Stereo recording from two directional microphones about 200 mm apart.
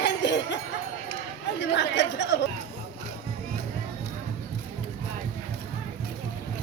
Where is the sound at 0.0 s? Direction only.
60° left (ahead or behind).